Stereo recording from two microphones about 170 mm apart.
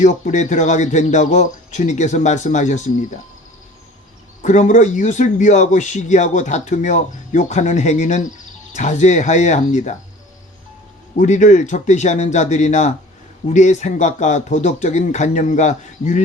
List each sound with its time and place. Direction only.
0.0 s a man's voice: 45° left (ahead or behind)
4.4 s a man's voice: 45° left (ahead or behind)
11.2 s a man's voice: 45° left (ahead or behind)